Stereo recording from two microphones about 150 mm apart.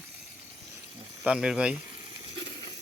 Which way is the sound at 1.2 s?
5° right (ahead or behind).